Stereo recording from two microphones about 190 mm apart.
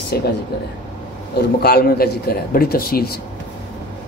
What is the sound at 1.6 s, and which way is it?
A man's voice, 55° left (ahead or behind).